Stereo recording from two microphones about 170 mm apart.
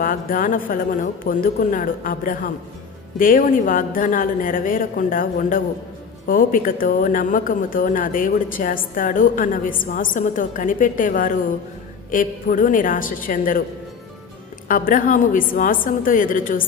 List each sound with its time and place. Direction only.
0.0 s a woman's voice: 55° left (ahead or behind)
14.7 s a woman's voice: 55° left (ahead or behind)